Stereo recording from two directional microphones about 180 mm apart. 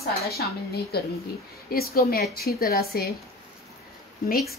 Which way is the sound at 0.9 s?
60° left (ahead or behind).